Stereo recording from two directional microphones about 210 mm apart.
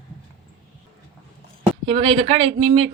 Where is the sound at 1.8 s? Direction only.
25° right (ahead or behind).